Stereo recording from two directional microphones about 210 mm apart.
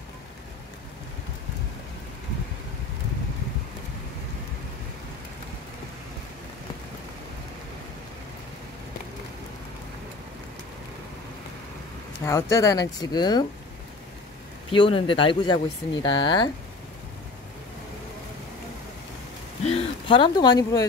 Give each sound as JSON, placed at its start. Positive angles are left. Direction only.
{"t": 12.3, "sound": "speech", "side_deg": 15}
{"t": 14.7, "sound": "speech", "side_deg": 25}
{"t": 19.6, "sound": "a sound", "side_deg": 25}